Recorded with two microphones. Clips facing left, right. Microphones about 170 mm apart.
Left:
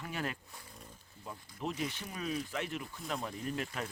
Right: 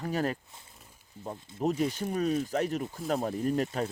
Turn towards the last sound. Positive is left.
turn(degrees=-40)  # may be behind; listen again after turning